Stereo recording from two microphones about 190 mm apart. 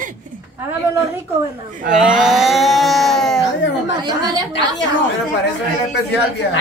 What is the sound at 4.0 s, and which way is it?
Speech, 20° right (ahead or behind).